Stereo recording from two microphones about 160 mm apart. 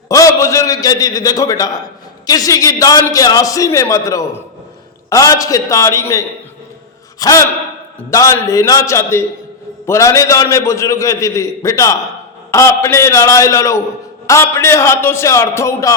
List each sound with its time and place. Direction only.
0.1 s a man's voice: 20° left (ahead or behind)